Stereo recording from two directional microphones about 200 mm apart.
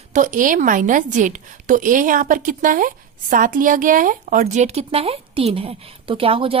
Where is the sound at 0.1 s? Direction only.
40° right (ahead or behind).